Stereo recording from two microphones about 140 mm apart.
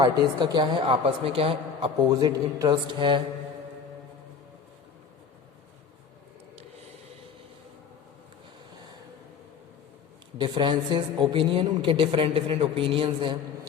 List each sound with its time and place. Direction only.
0.0 s a man's voice: 30° right (ahead or behind)
2.0 s a man's voice: 25° right (ahead or behind)
10.3 s a man's voice: 35° right (ahead or behind)